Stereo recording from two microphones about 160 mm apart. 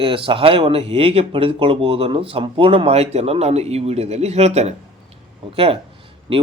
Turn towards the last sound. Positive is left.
turn(degrees=-35)  # may be behind; listen again after turning